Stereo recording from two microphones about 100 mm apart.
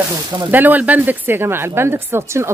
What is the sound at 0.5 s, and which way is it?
Speech, 20° right (ahead or behind).